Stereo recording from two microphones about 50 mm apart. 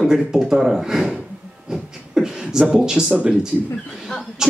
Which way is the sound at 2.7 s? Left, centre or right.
Centre.